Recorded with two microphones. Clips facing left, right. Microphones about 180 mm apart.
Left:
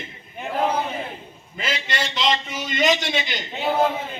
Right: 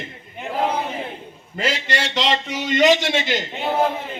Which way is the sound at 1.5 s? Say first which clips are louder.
Right 4 dB; 75° right (ahead or behind).